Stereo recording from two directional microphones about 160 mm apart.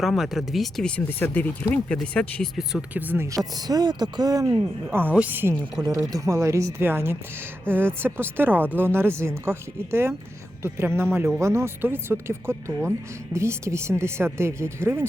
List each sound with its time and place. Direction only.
0.0 s speech: centre (ahead or behind)